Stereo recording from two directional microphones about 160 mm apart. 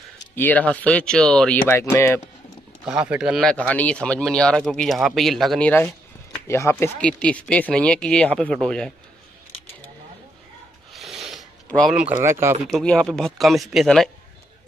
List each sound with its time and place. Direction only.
0.4 s speech: 10° left (ahead or behind)
2.8 s speech: 5° right (ahead or behind)
3.4 s speech: 10° left (ahead or behind)
10.9 s a sound: centre (ahead or behind)
12.2 s speech: 15° right (ahead or behind)
12.6 s speech: 5° left (ahead or behind)